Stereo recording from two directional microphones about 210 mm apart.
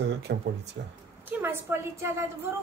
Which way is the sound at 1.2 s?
10° right (ahead or behind).